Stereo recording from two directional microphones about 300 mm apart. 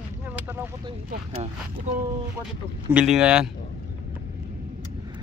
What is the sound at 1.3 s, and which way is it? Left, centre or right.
Speech, right.